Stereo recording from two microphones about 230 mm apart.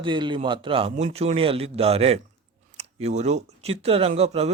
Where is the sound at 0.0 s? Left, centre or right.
Right.